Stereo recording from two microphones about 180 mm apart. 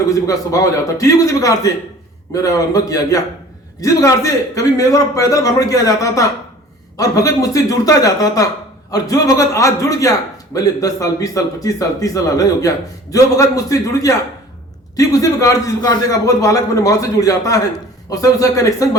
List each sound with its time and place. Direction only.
0.1 s a man's voice: 20° left (ahead or behind)